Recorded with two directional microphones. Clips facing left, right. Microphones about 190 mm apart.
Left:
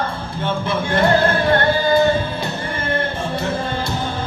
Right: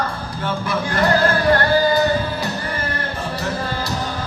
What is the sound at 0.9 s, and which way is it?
Music, 25° left (ahead or behind).